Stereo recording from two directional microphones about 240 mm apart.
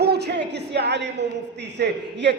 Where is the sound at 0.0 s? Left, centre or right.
Right.